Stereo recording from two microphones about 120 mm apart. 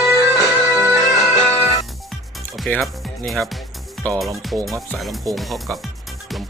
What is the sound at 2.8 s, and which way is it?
Speech, centre (ahead or behind).